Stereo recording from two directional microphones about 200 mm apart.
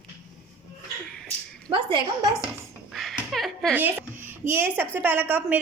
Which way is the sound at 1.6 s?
25° right (ahead or behind).